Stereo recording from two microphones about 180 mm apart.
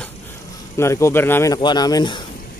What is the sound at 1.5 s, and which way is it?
Speech, 25° left (ahead or behind).